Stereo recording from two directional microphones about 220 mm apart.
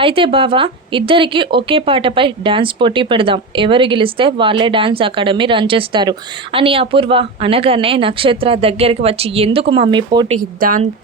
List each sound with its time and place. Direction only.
0.0 s speech: 25° right (ahead or behind)
10.6 s a woman's voice: 40° right (ahead or behind)